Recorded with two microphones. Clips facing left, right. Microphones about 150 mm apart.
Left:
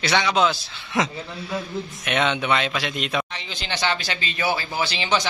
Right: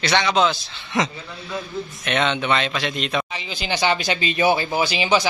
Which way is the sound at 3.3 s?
5° right (ahead or behind).